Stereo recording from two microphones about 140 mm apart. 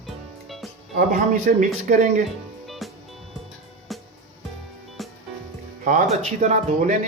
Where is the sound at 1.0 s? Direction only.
65° right (ahead or behind).